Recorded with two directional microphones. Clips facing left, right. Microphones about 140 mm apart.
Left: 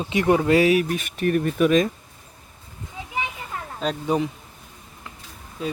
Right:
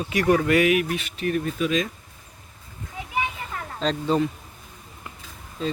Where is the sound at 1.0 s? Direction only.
50° left (ahead or behind).